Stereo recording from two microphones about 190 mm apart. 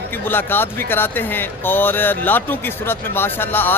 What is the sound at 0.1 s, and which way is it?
Speech, 10° left (ahead or behind).